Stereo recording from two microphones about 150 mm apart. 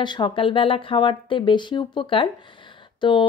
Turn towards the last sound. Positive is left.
turn(degrees=35)  # may be behind; listen again after turning